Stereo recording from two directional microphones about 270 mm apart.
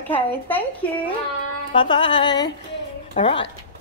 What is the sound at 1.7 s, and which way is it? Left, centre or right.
Music, centre.